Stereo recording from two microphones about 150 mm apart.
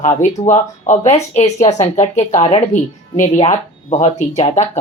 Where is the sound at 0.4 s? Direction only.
50° left (ahead or behind).